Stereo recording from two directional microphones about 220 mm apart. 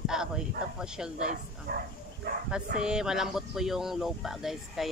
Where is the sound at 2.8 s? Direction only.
5° right (ahead or behind).